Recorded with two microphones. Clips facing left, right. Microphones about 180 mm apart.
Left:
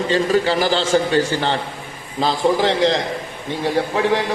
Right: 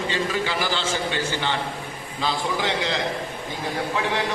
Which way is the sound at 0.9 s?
45° left (ahead or behind).